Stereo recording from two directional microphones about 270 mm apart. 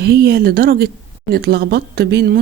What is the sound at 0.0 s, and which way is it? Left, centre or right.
Speech, right.